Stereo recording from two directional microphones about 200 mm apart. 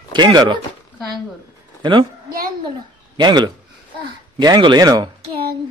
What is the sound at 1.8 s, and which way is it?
A man's voice, 25° right (ahead or behind).